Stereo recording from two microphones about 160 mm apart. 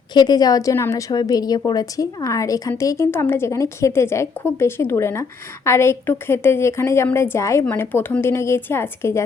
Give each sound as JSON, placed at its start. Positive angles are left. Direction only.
{"t": 0.1, "sound": "a woman's voice", "side_deg": 25}